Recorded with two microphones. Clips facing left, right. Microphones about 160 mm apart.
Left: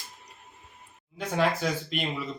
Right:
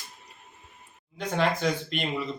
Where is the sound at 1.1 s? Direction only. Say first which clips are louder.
Even; 5° left (ahead or behind).